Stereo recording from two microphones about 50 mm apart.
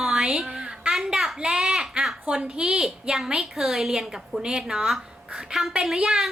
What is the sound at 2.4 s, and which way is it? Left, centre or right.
A woman's voice, centre.